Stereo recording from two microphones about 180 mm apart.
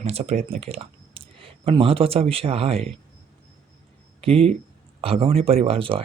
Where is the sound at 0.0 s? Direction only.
35° right (ahead or behind).